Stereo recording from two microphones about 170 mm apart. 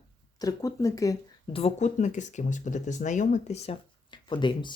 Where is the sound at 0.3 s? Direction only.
20° left (ahead or behind).